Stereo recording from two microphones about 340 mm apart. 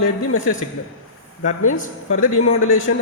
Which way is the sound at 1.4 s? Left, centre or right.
Left.